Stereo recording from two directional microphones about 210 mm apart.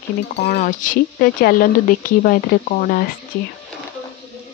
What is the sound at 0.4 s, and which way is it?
Speech, 35° left (ahead or behind).